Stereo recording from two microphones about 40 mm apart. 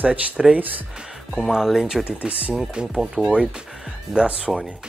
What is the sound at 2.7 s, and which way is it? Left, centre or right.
Speech, right.